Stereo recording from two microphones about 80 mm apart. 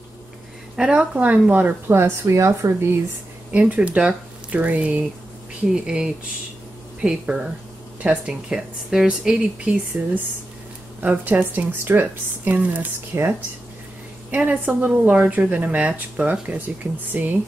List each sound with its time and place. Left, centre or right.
0.7 s a woman's voice: centre; by 2.7 s right
3.5 s a woman's voice: centre
14.3 s a woman's voice: right